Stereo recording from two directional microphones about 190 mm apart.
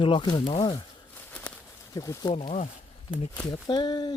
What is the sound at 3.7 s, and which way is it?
Speech, 20° left (ahead or behind).